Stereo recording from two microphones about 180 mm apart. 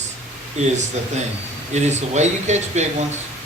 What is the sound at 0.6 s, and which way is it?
Speech, 40° right (ahead or behind).